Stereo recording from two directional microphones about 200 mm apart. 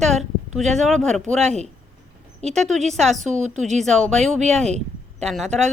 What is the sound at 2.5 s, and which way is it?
Speech, centre (ahead or behind).